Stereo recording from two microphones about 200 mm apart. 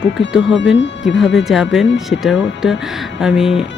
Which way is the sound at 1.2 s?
Centre (ahead or behind).